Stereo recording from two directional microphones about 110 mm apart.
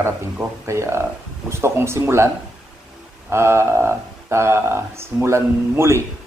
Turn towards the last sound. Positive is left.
turn(degrees=-25)  # may be behind; listen again after turning